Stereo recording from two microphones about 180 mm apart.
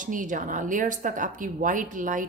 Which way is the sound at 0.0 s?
45° right (ahead or behind).